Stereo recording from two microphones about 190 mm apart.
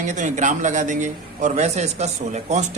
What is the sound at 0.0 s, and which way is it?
A man's voice, 40° right (ahead or behind).